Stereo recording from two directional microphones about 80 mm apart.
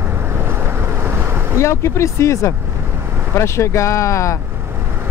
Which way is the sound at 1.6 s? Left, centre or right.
Left.